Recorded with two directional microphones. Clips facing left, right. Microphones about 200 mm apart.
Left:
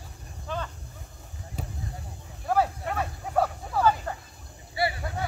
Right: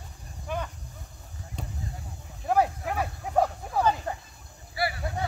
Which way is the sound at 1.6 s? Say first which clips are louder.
Left 2 dB; 5° left (ahead or behind).